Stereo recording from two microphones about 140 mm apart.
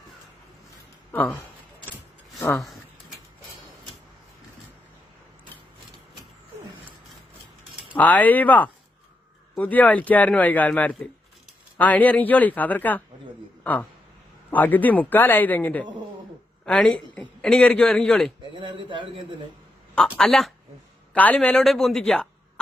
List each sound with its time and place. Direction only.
1.1 s speech: 10° left (ahead or behind)
7.9 s a man's voice: 10° left (ahead or behind)
14.5 s a man's voice: 10° left (ahead or behind)
18.6 s a man's voice: 35° right (ahead or behind)
20.0 s a man's voice: 5° left (ahead or behind)